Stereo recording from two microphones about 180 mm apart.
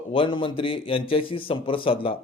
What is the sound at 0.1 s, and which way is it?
A man's voice, 30° left (ahead or behind).